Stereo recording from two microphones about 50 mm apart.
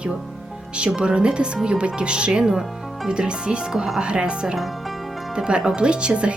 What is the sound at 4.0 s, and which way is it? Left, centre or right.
A woman's voice, right.